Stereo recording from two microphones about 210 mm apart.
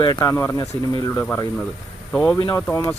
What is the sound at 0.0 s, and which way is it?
Speech, 20° left (ahead or behind).